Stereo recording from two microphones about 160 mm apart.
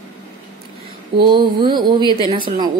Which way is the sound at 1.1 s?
30° right (ahead or behind).